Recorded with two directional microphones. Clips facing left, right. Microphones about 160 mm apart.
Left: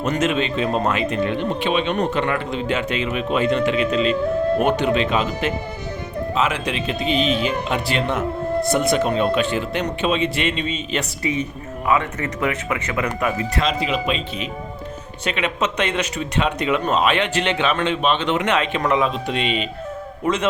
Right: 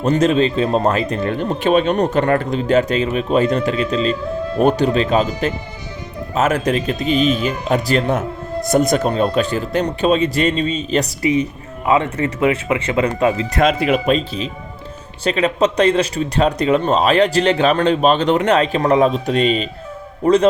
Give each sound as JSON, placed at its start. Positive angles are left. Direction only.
{"t": 0.0, "sound": "speech", "side_deg": -35}
{"t": 11.9, "sound": "speech", "side_deg": -25}
{"t": 13.6, "sound": "speech", "side_deg": -55}